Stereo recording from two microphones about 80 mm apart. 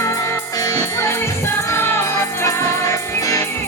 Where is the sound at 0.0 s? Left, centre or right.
Left.